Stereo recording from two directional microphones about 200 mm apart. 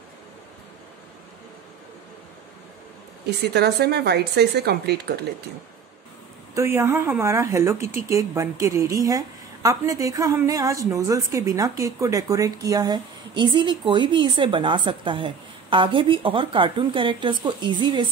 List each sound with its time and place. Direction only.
3.3 s speech: 55° right (ahead or behind)
6.5 s speech: 15° right (ahead or behind)